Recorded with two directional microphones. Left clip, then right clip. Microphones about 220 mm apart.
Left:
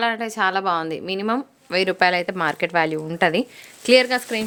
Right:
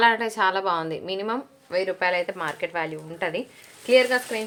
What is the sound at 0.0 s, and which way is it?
Speech, 35° left (ahead or behind).